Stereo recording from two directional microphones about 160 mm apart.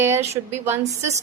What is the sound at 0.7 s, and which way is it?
Speech, 45° right (ahead or behind).